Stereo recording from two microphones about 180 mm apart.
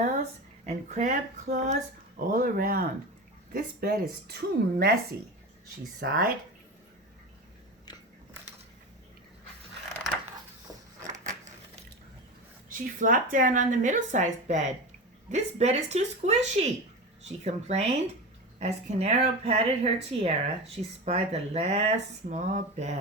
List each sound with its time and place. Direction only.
0.6 s a woman's voice: 40° right (ahead or behind); by 4.9 s 60° right (ahead or behind)
6.0 s a woman's voice: 55° right (ahead or behind)
11.0 s a sound: 40° right (ahead or behind)
12.7 s speech: 50° right (ahead or behind)